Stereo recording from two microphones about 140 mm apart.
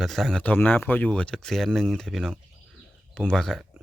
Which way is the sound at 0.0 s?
Centre (ahead or behind).